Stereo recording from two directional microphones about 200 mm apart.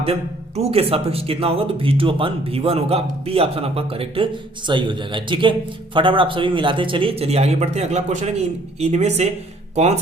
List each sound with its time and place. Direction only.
0.0 s speech: 30° right (ahead or behind)